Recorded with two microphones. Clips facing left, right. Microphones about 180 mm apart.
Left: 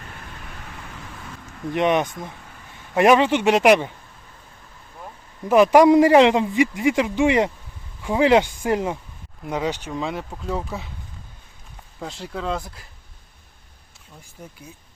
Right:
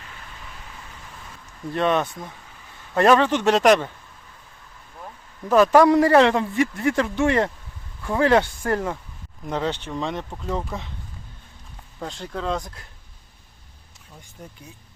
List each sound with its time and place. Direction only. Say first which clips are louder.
1.7 s a man's voice: left 2 dB; 15° left (ahead or behind)
5.0 s a man's voice: left 2 dB; 15° left (ahead or behind)
11.9 s speech: even; 5° left (ahead or behind)